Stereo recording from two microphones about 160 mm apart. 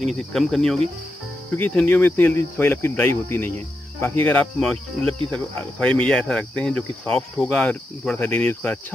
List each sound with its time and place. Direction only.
0.1 s speech: centre (ahead or behind)
1.5 s cricket: 10° left (ahead or behind)